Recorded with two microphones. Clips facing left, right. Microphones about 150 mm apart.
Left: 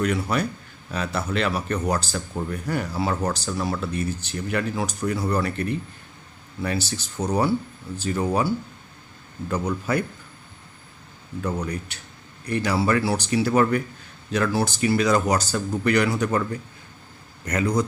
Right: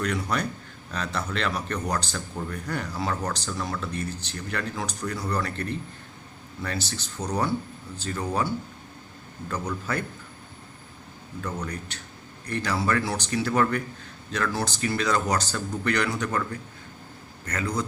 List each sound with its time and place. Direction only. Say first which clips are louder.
0.0 s a man's voice: left 4 dB; 5° left (ahead or behind)
9.9 s speech: left 6 dB; 10° left (ahead or behind)
11.6 s speech: left 4 dB; 10° left (ahead or behind)
17.4 s speech: left 6 dB; 15° left (ahead or behind)